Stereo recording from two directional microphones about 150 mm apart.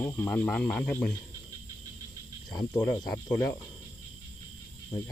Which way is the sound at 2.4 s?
30° left (ahead or behind).